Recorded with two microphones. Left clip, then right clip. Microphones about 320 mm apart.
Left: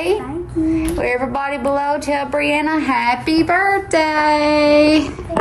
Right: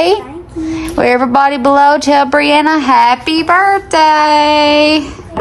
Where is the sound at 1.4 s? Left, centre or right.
Centre.